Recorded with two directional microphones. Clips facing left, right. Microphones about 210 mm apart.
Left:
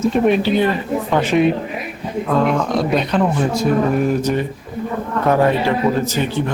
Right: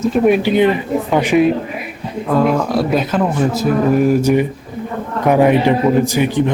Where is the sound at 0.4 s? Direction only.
15° right (ahead or behind).